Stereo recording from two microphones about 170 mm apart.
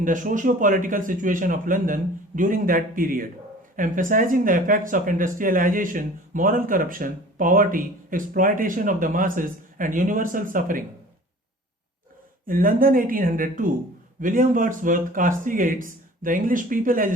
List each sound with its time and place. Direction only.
0.0 s speech: 50° right (ahead or behind)
12.5 s speech: 55° right (ahead or behind)